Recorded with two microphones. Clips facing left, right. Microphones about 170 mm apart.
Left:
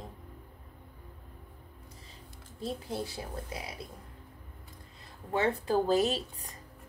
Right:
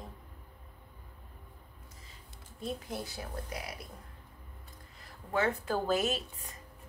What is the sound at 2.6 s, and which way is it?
Speech, 30° left (ahead or behind).